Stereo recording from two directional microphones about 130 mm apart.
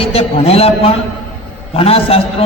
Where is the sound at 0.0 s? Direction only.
45° left (ahead or behind).